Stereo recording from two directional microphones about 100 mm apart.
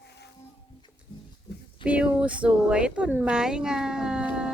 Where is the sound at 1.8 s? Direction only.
10° right (ahead or behind).